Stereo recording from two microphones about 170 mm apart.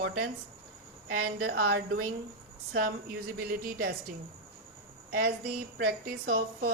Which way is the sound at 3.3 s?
60° right (ahead or behind).